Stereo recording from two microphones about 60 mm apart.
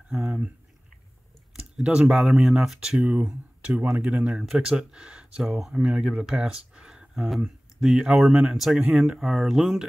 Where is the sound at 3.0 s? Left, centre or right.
Right.